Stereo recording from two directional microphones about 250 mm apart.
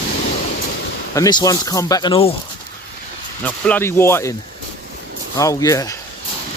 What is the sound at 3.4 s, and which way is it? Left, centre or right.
Speech, centre.